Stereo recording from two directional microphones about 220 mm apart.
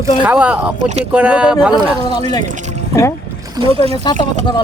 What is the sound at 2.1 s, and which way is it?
Speech, 20° left (ahead or behind).